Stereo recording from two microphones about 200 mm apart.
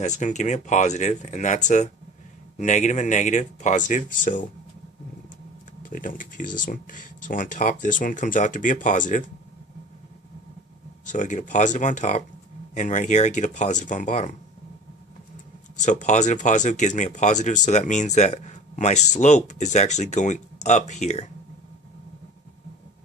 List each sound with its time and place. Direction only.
0.0 s speech: 35° left (ahead or behind)
5.8 s speech: 40° left (ahead or behind)
11.0 s speech: 40° left (ahead or behind)
15.8 s speech: 35° left (ahead or behind)